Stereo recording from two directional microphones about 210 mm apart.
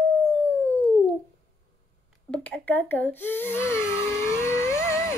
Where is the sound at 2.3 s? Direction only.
5° left (ahead or behind).